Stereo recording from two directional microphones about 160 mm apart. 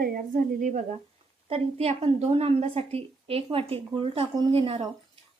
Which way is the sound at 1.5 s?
40° right (ahead or behind).